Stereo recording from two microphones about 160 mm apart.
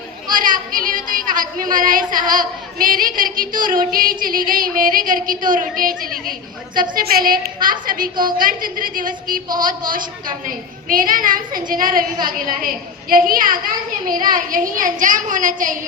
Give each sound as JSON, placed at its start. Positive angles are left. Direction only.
{"t": 0.3, "sound": "a woman's voice", "side_deg": -60}